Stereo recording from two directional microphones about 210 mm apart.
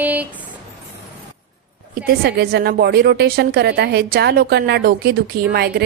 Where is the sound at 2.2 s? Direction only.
50° right (ahead or behind).